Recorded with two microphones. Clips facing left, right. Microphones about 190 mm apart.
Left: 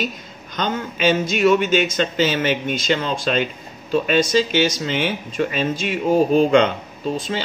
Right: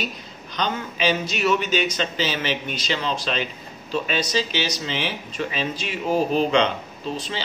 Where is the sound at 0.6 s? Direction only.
50° left (ahead or behind).